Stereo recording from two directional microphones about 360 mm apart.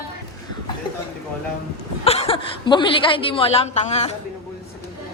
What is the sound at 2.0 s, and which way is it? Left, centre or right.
A woman's voice, centre.